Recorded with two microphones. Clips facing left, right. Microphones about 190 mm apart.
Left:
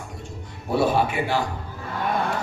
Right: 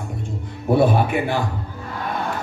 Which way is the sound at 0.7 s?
55° right (ahead or behind).